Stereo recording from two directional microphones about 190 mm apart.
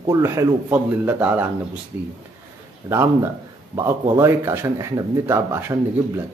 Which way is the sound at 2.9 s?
15° right (ahead or behind).